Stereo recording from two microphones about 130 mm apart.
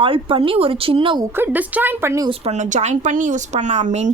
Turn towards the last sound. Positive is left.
turn(degrees=-65)  # may be behind; listen again after turning